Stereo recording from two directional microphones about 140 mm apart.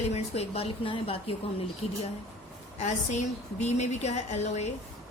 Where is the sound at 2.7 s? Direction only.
55° left (ahead or behind).